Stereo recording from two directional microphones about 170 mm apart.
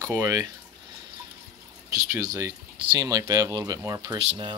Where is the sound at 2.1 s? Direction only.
20° right (ahead or behind).